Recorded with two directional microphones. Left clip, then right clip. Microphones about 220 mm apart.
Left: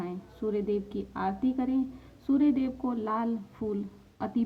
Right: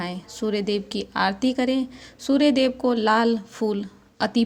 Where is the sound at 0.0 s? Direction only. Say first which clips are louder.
Right 6 dB; 30° right (ahead or behind).